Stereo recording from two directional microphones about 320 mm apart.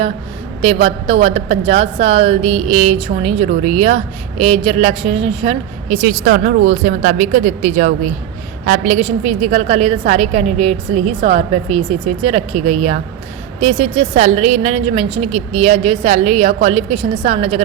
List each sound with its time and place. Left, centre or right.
0.6 s a woman's voice: centre